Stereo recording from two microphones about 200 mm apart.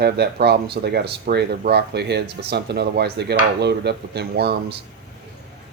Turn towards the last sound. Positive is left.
turn(degrees=-55)  # may be behind; listen again after turning